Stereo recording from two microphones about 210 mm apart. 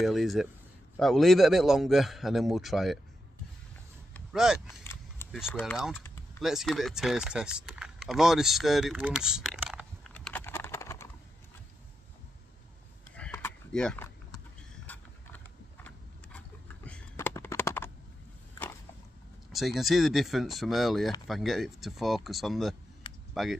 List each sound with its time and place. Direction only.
0.0 s a man's voice: centre (ahead or behind)
4.3 s a man's voice: centre (ahead or behind)
4.8 s single-lens reflex camera: 10° left (ahead or behind)
5.5 s a man's voice: 5° left (ahead or behind)
10.1 s typing: 10° left (ahead or behind)
13.1 s a sound: 10° left (ahead or behind)
19.5 s a man's voice: centre (ahead or behind)